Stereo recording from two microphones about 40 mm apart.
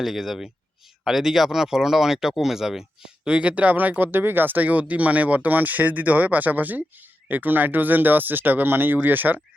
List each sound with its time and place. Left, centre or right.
0.0 s speech: centre
3.2 s speech: right